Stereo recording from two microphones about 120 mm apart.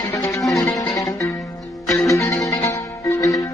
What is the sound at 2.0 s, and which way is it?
Music, 25° left (ahead or behind).